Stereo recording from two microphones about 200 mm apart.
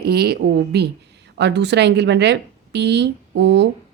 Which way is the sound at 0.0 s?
55° right (ahead or behind).